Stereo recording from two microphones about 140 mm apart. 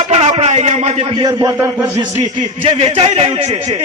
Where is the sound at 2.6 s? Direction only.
45° right (ahead or behind).